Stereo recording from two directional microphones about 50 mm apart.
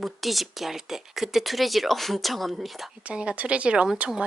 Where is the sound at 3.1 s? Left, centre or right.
Right.